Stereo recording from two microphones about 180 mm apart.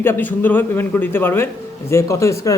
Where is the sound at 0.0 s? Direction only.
10° left (ahead or behind).